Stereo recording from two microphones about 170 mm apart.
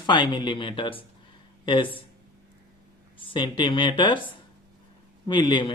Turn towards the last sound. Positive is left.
turn(degrees=25)  # may be behind; listen again after turning